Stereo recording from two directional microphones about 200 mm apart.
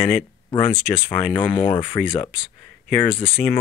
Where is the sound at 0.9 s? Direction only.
25° left (ahead or behind).